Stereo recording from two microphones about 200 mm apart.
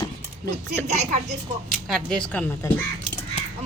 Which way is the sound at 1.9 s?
5° left (ahead or behind).